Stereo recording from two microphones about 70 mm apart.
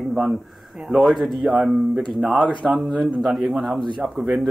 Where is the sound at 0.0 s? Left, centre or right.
Centre.